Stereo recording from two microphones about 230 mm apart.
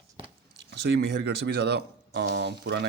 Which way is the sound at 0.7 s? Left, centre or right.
Right.